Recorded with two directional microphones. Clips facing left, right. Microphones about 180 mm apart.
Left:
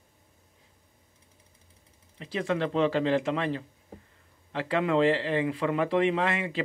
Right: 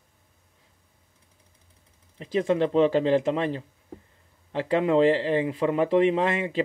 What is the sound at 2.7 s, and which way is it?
Speech, 40° right (ahead or behind).